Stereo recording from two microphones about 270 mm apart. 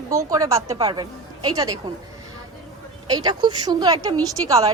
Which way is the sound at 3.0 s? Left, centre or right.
Centre.